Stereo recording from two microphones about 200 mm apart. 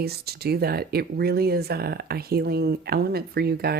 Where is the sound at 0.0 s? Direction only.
50° right (ahead or behind).